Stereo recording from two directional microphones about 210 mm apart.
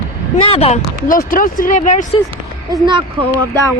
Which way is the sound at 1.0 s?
40° left (ahead or behind).